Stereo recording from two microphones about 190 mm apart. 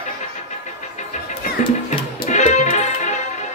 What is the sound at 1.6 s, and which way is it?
Music, 40° left (ahead or behind).